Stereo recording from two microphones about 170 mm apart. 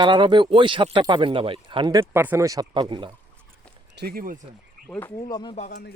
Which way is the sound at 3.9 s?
60° right (ahead or behind).